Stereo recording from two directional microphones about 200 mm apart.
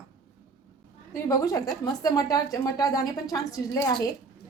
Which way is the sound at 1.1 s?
15° left (ahead or behind).